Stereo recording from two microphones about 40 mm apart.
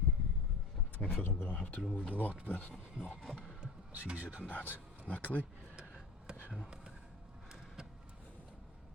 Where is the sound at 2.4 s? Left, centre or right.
Left.